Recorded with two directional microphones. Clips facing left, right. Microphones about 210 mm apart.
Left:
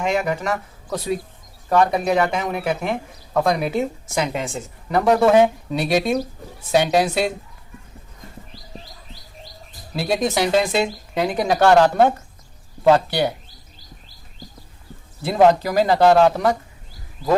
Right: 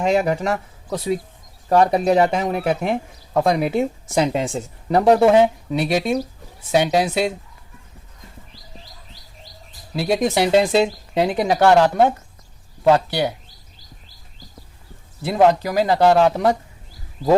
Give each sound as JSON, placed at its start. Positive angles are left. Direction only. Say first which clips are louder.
{"t": 0.0, "sound": "speech", "louder": "right 3 dB", "side_deg": -35}
{"t": 1.7, "sound": "speech", "louder": "right 2 dB", "side_deg": -35}
{"t": 9.9, "sound": "speech", "louder": "right 2 dB", "side_deg": -25}
{"t": 11.8, "sound": "speech", "louder": "even", "side_deg": -10}
{"t": 15.3, "sound": "speech", "louder": "left 1 dB", "side_deg": -10}